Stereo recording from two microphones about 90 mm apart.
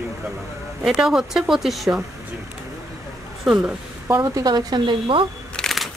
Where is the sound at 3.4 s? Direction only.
15° right (ahead or behind).